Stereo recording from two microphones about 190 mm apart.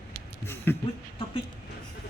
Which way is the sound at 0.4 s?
10° left (ahead or behind).